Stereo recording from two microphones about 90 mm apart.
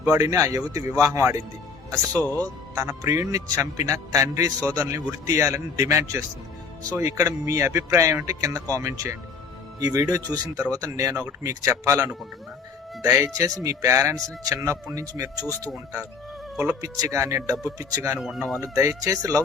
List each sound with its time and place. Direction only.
0.1 s a man's voice: 35° right (ahead or behind)
2.1 s a man's voice: 20° left (ahead or behind)
2.7 s a man's voice: 30° right (ahead or behind)
16.8 s a man's voice: 35° right (ahead or behind)
18.2 s speech: 5° right (ahead or behind)
18.6 s a man's voice: 35° right (ahead or behind)